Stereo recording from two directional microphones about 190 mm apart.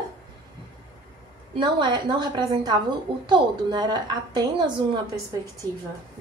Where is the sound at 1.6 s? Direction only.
25° right (ahead or behind).